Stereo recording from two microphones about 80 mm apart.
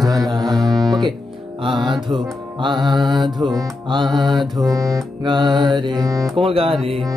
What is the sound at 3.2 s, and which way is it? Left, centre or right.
Music, right.